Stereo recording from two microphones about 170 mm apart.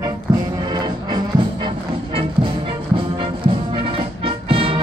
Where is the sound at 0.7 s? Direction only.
25° right (ahead or behind).